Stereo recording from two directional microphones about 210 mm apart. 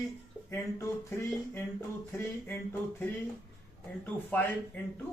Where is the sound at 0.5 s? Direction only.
15° left (ahead or behind).